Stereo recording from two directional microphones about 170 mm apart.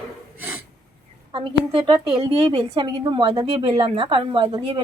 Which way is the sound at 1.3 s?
30° right (ahead or behind).